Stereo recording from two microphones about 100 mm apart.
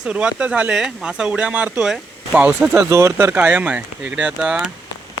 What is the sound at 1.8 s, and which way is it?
Speech, 5° right (ahead or behind).